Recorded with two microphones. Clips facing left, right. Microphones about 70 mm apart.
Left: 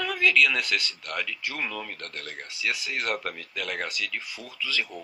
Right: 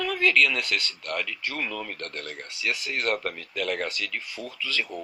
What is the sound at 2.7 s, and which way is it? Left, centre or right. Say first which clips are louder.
Speech: right 2 dB; right.